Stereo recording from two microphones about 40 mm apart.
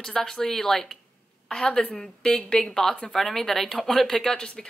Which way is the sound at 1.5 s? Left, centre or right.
Left.